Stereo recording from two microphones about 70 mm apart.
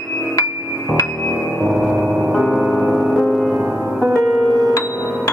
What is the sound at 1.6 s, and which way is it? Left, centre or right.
Synthesizer, centre.